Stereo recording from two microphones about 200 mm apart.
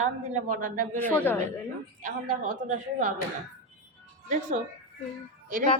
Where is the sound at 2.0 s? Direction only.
40° right (ahead or behind).